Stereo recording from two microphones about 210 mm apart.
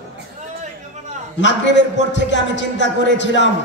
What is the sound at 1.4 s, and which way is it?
A man's voice, 60° left (ahead or behind).